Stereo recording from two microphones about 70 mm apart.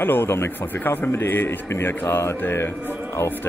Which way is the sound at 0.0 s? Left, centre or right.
Left.